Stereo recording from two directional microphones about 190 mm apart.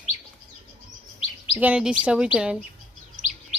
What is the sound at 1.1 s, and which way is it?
Chirp, 30° left (ahead or behind).